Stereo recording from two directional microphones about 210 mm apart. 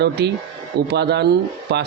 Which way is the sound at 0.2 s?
50° right (ahead or behind).